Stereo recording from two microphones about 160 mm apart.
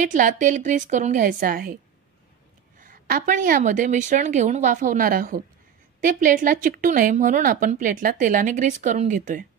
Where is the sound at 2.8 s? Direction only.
60° right (ahead or behind).